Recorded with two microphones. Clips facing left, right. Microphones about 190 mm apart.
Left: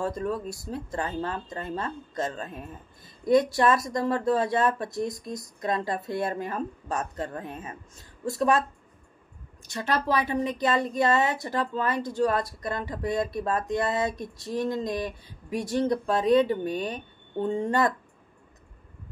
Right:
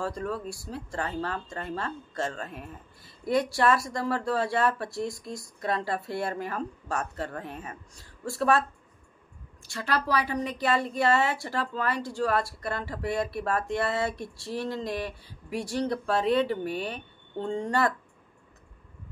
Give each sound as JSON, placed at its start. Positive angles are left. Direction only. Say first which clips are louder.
{"t": 0.0, "sound": "speech", "louder": "left 3 dB", "side_deg": 20}